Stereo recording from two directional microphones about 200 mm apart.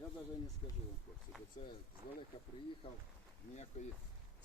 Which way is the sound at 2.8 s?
25° left (ahead or behind).